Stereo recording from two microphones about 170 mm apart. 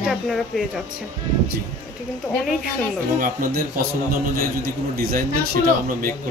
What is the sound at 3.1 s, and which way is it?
A man's voice, 55° right (ahead or behind).